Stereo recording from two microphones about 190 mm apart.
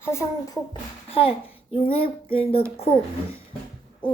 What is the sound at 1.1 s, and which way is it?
A child's voice, 30° left (ahead or behind).